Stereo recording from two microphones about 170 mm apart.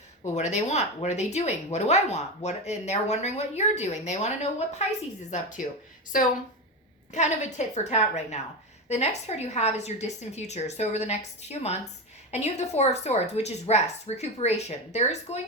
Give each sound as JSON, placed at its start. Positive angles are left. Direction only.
{"t": 0.3, "sound": "speech", "side_deg": 45}
{"t": 7.1, "sound": "speech", "side_deg": 45}